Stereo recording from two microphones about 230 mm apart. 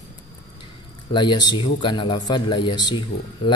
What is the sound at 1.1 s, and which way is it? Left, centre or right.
A man's voice, left.